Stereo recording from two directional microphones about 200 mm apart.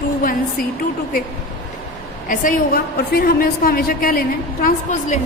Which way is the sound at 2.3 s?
45° left (ahead or behind).